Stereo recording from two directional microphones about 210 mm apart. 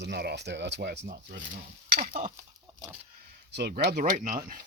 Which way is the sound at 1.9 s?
35° right (ahead or behind).